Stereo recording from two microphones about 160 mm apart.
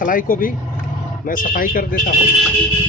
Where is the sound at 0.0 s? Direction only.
60° left (ahead or behind).